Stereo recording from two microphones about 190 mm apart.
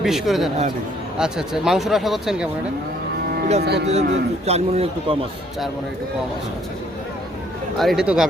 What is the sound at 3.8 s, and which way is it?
A man's voice, 35° right (ahead or behind).